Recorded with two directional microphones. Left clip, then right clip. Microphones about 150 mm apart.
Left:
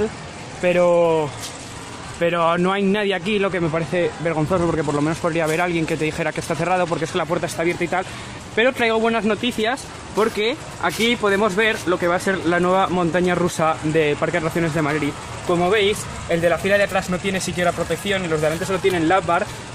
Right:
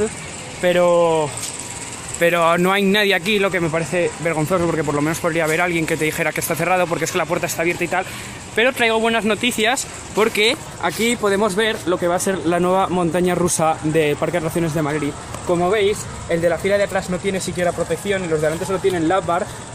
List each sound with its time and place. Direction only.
0.6 s speech: 5° left (ahead or behind)
3.3 s speech: 5° left (ahead or behind); by 9.1 s 25° left (ahead or behind)
9.4 s speech: 5° right (ahead or behind)
15.6 s speech: 5° right (ahead or behind)
18.3 s speech: 5° left (ahead or behind)
19.0 s speech: 5° right (ahead or behind)